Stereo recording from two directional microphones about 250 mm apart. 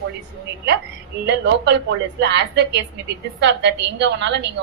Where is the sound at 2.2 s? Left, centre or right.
Right.